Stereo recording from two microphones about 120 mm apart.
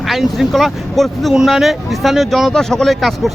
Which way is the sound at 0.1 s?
Centre (ahead or behind).